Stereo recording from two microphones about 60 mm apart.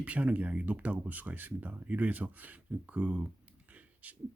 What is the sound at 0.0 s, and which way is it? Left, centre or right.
Speech, right.